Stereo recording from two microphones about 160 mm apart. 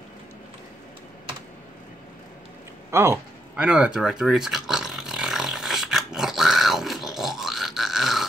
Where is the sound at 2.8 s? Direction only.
15° right (ahead or behind).